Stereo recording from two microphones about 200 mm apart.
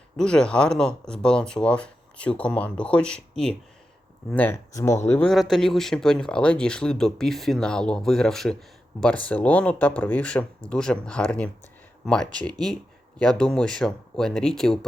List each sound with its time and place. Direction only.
0.2 s speech: 5° left (ahead or behind)